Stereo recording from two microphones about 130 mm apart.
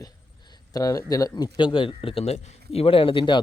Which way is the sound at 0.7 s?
25° left (ahead or behind).